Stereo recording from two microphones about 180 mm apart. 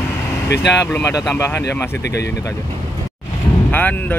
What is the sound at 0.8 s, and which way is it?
Speech, 10° left (ahead or behind).